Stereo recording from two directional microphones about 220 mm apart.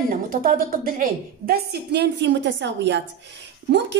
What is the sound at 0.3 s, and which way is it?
A woman's voice, 40° right (ahead or behind).